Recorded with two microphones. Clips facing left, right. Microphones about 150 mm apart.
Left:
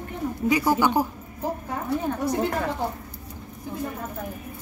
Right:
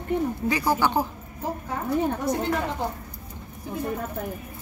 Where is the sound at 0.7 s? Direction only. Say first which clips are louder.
Even; 15° left (ahead or behind).